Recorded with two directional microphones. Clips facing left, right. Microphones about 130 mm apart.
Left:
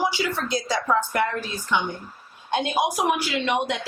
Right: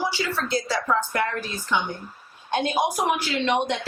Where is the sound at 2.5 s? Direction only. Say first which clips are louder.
Even; 15° left (ahead or behind).